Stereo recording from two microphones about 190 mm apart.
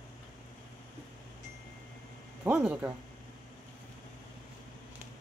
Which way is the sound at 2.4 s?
5° right (ahead or behind).